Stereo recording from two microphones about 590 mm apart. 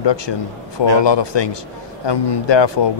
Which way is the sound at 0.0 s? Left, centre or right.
Left.